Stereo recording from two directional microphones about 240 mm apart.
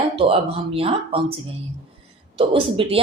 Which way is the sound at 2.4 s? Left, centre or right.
Right.